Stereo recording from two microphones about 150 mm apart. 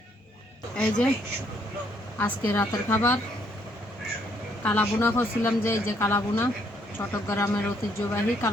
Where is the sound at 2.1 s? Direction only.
15° left (ahead or behind).